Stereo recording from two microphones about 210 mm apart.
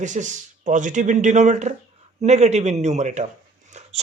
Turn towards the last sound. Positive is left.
turn(degrees=-30)  # may be behind; listen again after turning